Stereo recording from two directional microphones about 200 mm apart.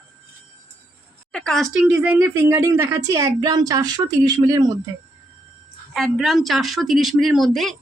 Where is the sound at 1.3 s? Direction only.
5° left (ahead or behind); by 4.8 s 20° right (ahead or behind).